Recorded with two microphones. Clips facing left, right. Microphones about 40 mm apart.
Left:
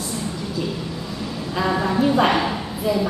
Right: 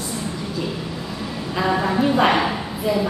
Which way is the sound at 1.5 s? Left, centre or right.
Centre.